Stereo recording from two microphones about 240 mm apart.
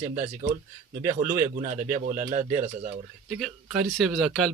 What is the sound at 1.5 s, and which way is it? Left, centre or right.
Speech, right.